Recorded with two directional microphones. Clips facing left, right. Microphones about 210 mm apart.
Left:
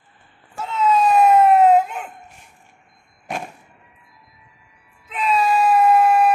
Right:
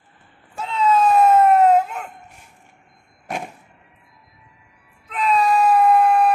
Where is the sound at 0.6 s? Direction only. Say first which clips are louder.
Even; 5° left (ahead or behind).